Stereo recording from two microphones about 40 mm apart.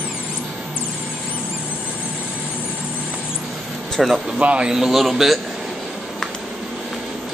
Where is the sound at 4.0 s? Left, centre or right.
Centre.